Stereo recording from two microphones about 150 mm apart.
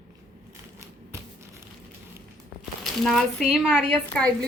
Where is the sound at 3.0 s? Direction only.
Centre (ahead or behind).